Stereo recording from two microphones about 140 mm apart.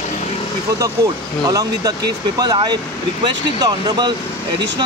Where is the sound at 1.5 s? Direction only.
25° right (ahead or behind).